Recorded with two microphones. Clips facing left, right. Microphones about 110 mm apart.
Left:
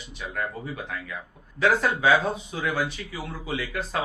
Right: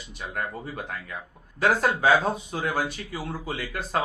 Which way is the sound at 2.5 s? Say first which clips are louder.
Even; 40° right (ahead or behind).